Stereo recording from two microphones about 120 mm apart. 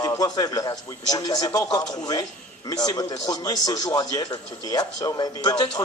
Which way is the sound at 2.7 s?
30° left (ahead or behind).